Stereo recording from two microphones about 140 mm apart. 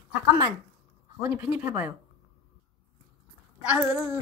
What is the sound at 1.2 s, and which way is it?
Speech, 10° right (ahead or behind).